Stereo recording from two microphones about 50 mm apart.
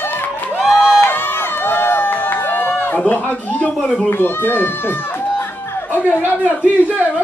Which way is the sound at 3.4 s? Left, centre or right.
Left.